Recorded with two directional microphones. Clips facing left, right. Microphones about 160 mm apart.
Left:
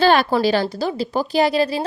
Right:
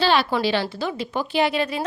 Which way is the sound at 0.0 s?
50° left (ahead or behind).